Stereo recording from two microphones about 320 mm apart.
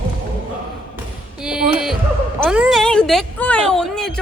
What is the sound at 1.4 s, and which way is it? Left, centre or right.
Music, centre.